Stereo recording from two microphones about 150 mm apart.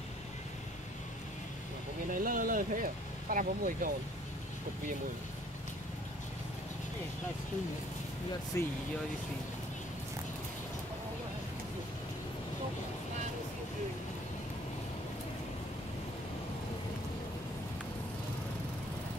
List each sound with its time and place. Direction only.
2.0 s speech: 65° right (ahead or behind)
8.5 s speech: 20° left (ahead or behind)